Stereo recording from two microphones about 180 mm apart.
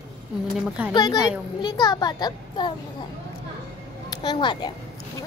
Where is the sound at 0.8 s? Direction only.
5° right (ahead or behind).